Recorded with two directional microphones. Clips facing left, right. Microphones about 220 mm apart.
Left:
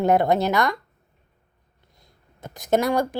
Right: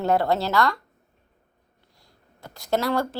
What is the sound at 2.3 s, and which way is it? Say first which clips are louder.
Speech: left 4 dB; 20° left (ahead or behind).